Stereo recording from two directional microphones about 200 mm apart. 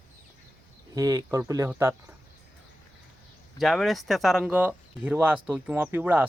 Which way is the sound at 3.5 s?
Centre (ahead or behind).